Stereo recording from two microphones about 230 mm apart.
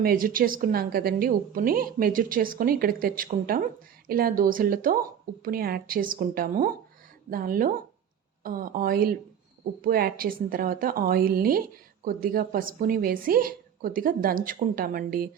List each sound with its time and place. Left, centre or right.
0.0 s a woman's voice: right